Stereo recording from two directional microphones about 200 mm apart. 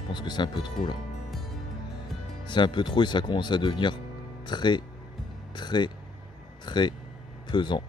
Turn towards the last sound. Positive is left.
turn(degrees=25)  # may be behind; listen again after turning